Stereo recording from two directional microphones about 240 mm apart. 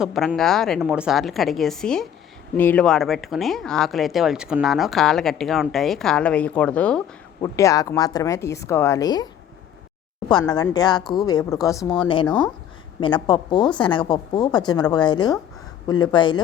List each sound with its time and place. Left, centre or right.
0.0 s speech: centre
10.2 s a woman's voice: centre